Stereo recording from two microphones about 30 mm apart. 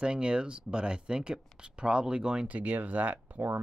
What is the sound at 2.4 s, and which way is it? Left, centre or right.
Speech, right.